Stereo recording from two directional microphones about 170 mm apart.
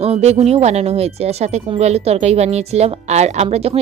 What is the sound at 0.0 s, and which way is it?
Speech, 40° right (ahead or behind).